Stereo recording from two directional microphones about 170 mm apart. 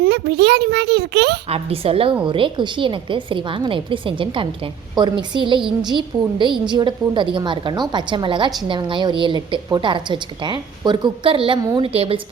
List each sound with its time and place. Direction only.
0.0 s a child's voice: 80° right
1.5 s a woman's voice: 35° right (ahead or behind)